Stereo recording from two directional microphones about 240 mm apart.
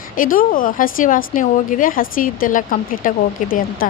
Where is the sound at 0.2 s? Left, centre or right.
Left.